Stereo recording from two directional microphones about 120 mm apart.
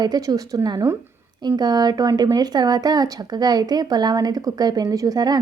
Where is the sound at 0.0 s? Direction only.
35° right (ahead or behind).